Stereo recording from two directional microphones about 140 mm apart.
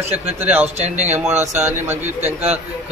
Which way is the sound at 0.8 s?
55° right (ahead or behind).